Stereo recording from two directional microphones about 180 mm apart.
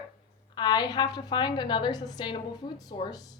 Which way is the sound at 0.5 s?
25° left (ahead or behind).